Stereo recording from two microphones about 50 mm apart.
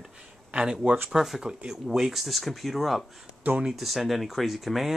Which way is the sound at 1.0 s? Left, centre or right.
Centre.